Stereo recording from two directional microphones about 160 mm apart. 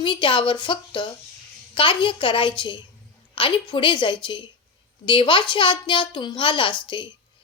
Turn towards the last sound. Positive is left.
turn(degrees=30)  # may be behind; listen again after turning